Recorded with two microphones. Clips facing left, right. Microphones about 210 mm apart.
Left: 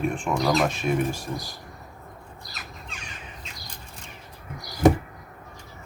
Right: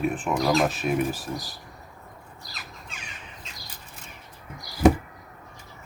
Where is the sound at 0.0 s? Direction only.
5° right (ahead or behind).